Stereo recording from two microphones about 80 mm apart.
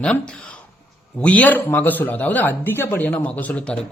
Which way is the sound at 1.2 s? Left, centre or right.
Centre.